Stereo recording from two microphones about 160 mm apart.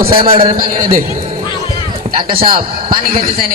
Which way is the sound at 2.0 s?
50° right (ahead or behind).